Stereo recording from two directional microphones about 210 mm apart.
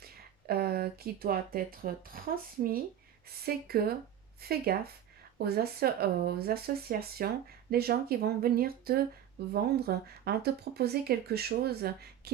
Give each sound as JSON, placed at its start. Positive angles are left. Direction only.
{"t": 0.0, "sound": "speech", "side_deg": -50}
{"t": 3.2, "sound": "speech", "side_deg": -45}